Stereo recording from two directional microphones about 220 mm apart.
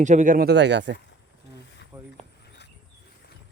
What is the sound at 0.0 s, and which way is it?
Speech, 35° right (ahead or behind).